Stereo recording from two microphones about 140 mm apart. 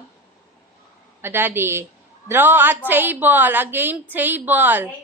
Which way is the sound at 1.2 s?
15° right (ahead or behind).